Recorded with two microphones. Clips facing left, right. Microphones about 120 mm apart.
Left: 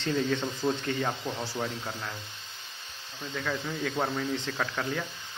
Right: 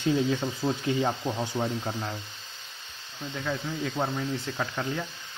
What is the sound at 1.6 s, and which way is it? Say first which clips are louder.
Speech: right 4 dB; 35° right (ahead or behind).